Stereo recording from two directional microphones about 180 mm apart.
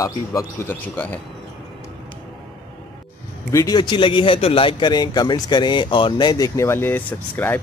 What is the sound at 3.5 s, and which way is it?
A man's voice, 20° left (ahead or behind).